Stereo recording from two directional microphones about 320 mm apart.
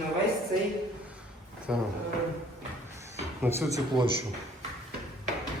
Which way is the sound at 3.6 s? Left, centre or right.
Centre.